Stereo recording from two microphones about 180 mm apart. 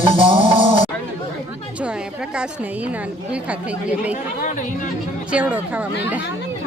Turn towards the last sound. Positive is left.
turn(degrees=-5)  # may be behind; listen again after turning